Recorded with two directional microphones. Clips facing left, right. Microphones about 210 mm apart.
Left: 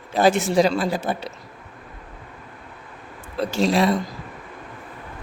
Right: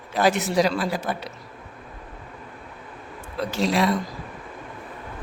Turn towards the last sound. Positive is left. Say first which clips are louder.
# left 3 dB
turn(degrees=25)  # may be behind; listen again after turning